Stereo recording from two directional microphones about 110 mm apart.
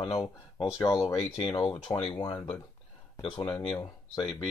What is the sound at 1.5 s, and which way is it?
Speech, 45° left (ahead or behind).